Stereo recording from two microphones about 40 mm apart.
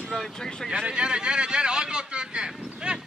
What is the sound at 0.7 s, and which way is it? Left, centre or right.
Vehicle, right.